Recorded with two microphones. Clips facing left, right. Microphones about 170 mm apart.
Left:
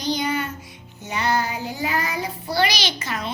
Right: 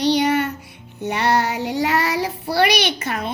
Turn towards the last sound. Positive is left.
turn(degrees=-55)  # may be behind; listen again after turning